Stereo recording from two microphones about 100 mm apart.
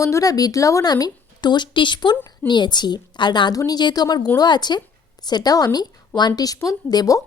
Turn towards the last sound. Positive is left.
turn(degrees=40)  # may be behind; listen again after turning